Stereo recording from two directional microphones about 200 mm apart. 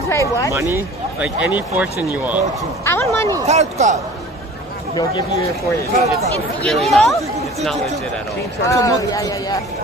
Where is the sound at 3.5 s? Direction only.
35° right (ahead or behind).